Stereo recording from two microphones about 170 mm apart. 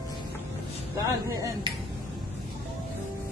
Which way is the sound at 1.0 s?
20° right (ahead or behind).